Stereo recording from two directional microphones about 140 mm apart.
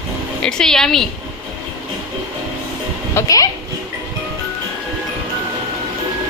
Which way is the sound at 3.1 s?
25° left (ahead or behind).